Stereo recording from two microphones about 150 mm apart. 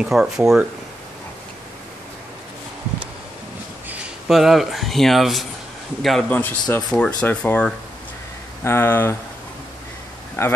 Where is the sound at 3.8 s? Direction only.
5° right (ahead or behind); by 9.1 s 15° left (ahead or behind).